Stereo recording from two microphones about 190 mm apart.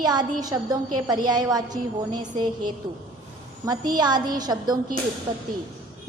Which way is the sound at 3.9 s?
20° right (ahead or behind).